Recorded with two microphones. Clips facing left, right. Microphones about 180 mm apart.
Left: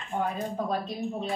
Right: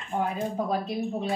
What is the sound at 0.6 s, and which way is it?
Speech, 5° right (ahead or behind).